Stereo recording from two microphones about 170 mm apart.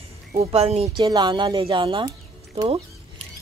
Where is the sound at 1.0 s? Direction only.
25° right (ahead or behind).